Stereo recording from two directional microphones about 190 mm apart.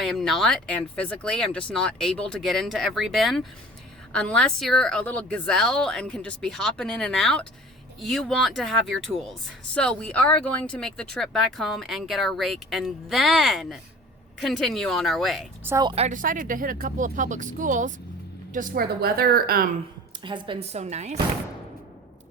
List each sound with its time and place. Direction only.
0.0 s speech: centre (ahead or behind)
15.6 s a woman's voice: 20° right (ahead or behind)
16.0 s speech: 45° right (ahead or behind)
20.2 s speech: 25° right (ahead or behind)